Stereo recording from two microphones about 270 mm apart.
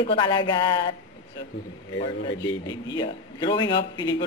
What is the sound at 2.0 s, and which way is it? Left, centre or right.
A woman's voice, centre.